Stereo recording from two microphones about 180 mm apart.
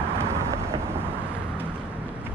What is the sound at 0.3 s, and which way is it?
Thunder, 15° right (ahead or behind).